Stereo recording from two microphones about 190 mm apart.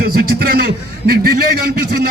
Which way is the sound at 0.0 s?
55° right (ahead or behind).